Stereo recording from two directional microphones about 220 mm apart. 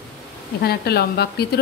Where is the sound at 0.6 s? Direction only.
45° left (ahead or behind).